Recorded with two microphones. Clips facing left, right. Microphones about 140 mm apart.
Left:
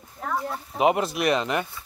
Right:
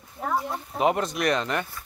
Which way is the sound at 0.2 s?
15° right (ahead or behind).